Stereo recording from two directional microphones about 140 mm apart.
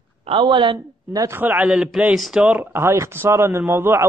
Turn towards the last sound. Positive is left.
turn(degrees=-20)  # may be behind; listen again after turning